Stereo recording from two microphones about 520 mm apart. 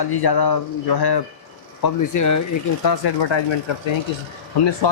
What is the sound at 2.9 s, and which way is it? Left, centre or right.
Speech, left.